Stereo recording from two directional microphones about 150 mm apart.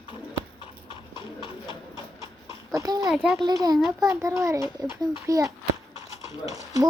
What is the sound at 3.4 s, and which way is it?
A child's voice, 25° right (ahead or behind).